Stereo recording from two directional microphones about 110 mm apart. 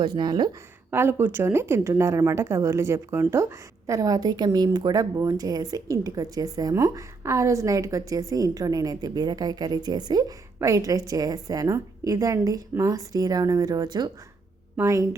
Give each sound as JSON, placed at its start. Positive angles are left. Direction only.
{"t": 0.0, "sound": "speech", "side_deg": -40}
{"t": 0.9, "sound": "a woman's voice", "side_deg": -20}